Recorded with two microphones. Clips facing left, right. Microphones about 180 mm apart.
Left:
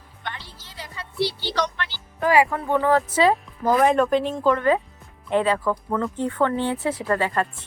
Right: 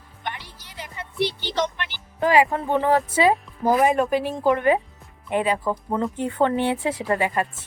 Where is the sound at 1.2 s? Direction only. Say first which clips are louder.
Even; 20° right (ahead or behind).